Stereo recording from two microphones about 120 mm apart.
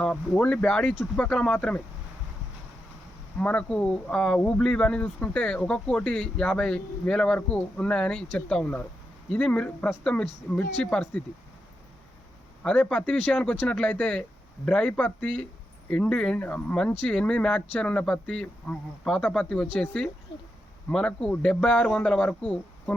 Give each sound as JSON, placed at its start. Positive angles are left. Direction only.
{"t": 0.0, "sound": "speech", "side_deg": 10}
{"t": 3.3, "sound": "speech", "side_deg": 10}
{"t": 10.5, "sound": "speech", "side_deg": 20}
{"t": 10.9, "sound": "speech", "side_deg": 5}
{"t": 12.6, "sound": "speech", "side_deg": 10}